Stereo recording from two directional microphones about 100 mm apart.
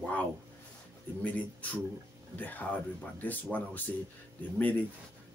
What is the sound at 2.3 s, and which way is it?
Speech, 15° left (ahead or behind).